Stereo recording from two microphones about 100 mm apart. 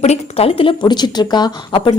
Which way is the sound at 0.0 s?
90° left.